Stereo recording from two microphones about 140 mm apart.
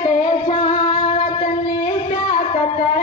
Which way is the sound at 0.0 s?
40° left (ahead or behind).